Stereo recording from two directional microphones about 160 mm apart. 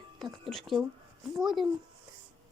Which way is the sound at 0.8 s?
20° right (ahead or behind).